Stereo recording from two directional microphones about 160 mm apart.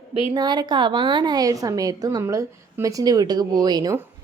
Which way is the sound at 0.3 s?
25° right (ahead or behind).